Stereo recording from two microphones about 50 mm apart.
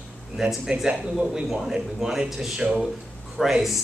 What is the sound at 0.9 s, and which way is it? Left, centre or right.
Speech, centre.